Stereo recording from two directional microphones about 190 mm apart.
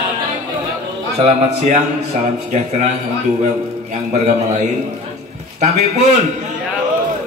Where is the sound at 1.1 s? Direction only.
35° right (ahead or behind).